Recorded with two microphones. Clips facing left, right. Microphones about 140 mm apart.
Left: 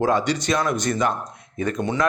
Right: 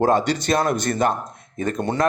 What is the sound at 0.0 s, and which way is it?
A man's voice, 50° right (ahead or behind).